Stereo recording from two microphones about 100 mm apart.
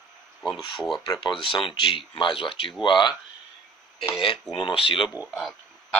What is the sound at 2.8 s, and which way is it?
Speech, 50° left (ahead or behind).